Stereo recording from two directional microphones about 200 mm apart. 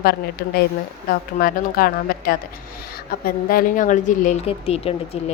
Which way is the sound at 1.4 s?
45° left (ahead or behind).